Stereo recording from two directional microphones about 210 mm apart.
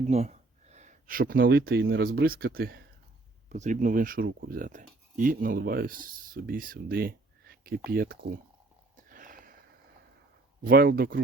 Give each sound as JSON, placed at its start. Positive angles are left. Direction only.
{"t": 0.1, "sound": "speech", "side_deg": -30}
{"t": 9.0, "sound": "a sound", "side_deg": -40}
{"t": 10.6, "sound": "speech", "side_deg": -45}